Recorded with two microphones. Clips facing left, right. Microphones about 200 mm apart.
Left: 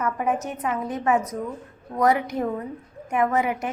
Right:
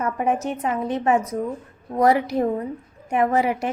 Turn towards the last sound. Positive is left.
turn(degrees=-30)  # may be behind; listen again after turning